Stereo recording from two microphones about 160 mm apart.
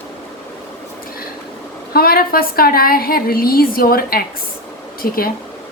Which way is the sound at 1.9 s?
70° left (ahead or behind).